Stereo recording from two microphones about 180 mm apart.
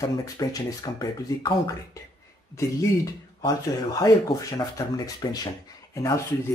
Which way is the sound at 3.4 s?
20° left (ahead or behind).